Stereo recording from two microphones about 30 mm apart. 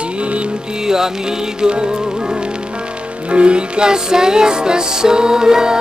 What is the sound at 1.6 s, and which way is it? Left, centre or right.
Music, right.